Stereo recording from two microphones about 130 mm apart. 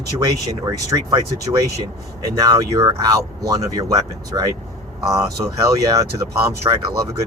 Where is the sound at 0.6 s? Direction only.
25° right (ahead or behind).